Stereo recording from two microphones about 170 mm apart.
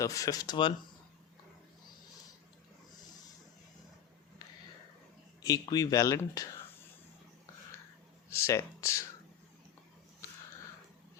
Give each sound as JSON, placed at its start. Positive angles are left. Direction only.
{"t": 0.0, "sound": "speech", "side_deg": 20}
{"t": 5.4, "sound": "speech", "side_deg": 20}
{"t": 8.4, "sound": "speech", "side_deg": 15}